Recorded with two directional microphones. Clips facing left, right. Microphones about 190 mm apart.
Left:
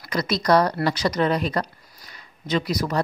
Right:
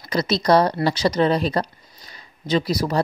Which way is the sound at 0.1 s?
25° right (ahead or behind).